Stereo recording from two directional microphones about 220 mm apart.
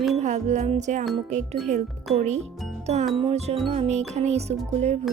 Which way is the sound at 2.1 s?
30° right (ahead or behind).